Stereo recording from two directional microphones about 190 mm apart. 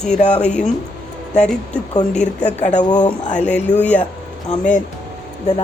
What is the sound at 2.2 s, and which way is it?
Speech, 35° left (ahead or behind).